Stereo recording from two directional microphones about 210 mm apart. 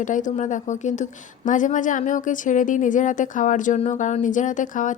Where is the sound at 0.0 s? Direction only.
35° left (ahead or behind).